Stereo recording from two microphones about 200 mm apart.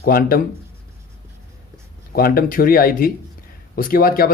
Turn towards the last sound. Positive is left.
turn(degrees=45)  # may be behind; listen again after turning